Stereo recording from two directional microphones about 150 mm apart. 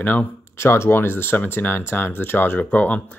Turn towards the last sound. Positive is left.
turn(degrees=10)  # may be behind; listen again after turning